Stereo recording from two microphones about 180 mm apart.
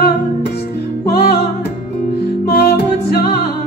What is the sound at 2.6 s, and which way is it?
Music, 60° left (ahead or behind).